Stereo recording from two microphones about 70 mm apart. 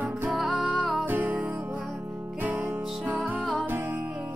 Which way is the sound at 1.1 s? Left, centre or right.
Right.